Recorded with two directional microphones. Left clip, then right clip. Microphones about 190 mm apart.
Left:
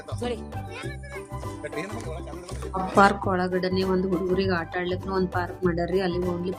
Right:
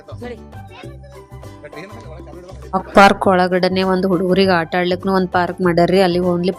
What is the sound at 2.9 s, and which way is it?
A woman's voice, 45° right (ahead or behind).